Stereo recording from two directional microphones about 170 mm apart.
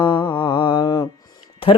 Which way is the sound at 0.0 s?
30° left (ahead or behind).